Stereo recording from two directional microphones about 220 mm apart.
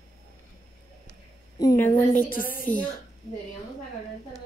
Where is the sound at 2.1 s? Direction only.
40° left (ahead or behind).